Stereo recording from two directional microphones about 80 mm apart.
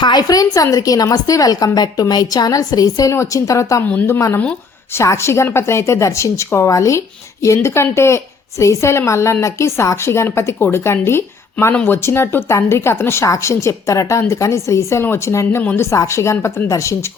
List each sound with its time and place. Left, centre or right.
0.0 s a woman's voice: left
11.7 s speech: centre
12.0 s a woman's voice: left